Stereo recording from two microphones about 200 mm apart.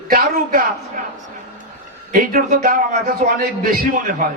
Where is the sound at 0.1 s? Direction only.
45° right (ahead or behind).